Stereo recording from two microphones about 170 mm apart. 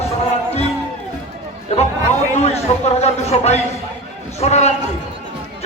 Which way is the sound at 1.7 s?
40° left (ahead or behind).